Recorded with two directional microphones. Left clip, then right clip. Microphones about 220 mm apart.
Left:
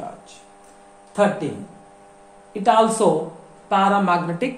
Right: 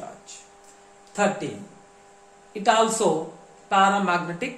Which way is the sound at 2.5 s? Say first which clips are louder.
Left 4 dB; 15° left (ahead or behind).